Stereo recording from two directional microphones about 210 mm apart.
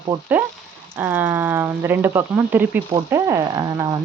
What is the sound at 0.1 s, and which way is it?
Speech, 10° right (ahead or behind).